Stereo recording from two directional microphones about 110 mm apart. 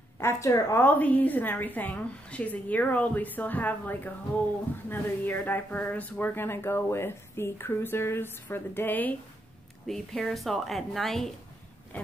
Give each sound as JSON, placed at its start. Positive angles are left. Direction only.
{"t": 0.2, "sound": "speech", "side_deg": 25}
{"t": 0.8, "sound": "a woman's voice", "side_deg": 15}
{"t": 9.8, "sound": "a woman's voice", "side_deg": 0}